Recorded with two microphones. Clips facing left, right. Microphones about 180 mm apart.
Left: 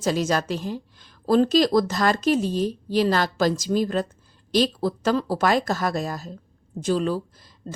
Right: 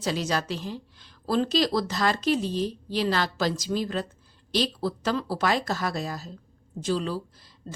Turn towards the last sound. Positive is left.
turn(degrees=50)  # may be behind; listen again after turning